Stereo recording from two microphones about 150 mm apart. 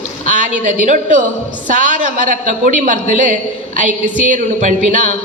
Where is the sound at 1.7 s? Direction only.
60° right (ahead or behind).